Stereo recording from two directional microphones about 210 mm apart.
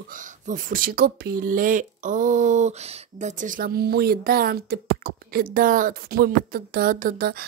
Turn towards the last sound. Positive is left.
turn(degrees=-45)  # may be behind; listen again after turning